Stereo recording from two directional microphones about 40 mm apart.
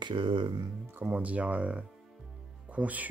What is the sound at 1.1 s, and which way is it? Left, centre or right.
Speech, right.